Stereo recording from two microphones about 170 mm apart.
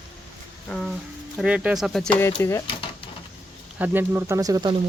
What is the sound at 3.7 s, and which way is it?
Speech, 10° right (ahead or behind).